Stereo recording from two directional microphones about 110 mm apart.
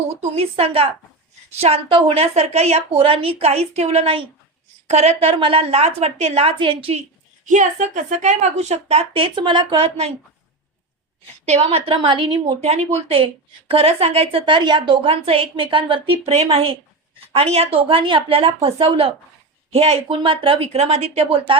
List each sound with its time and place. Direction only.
0.2 s a woman's voice: 70° right (ahead or behind)
4.9 s a woman's voice: 75° right (ahead or behind); by 7.0 s 55° right (ahead or behind)
7.4 s a woman's voice: 90° right
9.2 s a woman's voice: 45° right (ahead or behind)
11.4 s a woman's voice: 70° right (ahead or behind); by 12.5 s 50° right (ahead or behind)
12.5 s a woman's voice: 70° right (ahead or behind); by 15.1 s 45° right (ahead or behind)
15.1 s a woman's voice: 55° right (ahead or behind)